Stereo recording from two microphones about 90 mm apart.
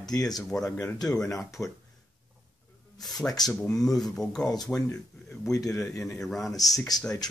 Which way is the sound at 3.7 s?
5° left (ahead or behind).